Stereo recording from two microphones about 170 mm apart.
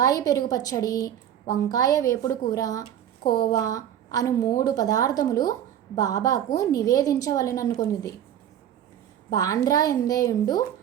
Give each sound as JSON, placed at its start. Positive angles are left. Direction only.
{"t": 0.0, "sound": "a woman's voice", "side_deg": 20}
{"t": 9.3, "sound": "a woman's voice", "side_deg": 20}